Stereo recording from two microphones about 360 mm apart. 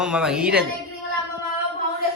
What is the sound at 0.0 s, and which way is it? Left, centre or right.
Speech, centre.